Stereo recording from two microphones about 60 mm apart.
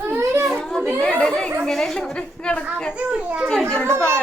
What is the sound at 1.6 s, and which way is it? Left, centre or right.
Speech, centre.